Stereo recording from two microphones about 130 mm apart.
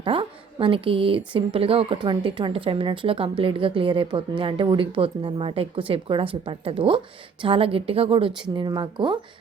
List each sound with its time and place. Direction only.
0.0 s a woman's voice: 40° right (ahead or behind)